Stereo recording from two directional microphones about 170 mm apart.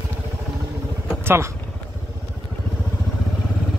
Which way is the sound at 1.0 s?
15° right (ahead or behind).